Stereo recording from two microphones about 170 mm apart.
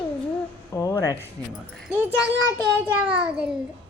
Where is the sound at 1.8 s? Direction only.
10° right (ahead or behind).